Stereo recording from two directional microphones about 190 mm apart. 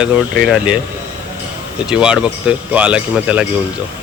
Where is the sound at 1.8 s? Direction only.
5° right (ahead or behind).